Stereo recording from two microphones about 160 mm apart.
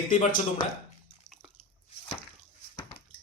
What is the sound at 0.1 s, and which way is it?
Speech, 50° left (ahead or behind).